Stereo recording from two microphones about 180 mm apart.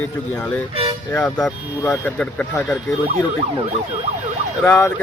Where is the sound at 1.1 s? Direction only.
10° left (ahead or behind).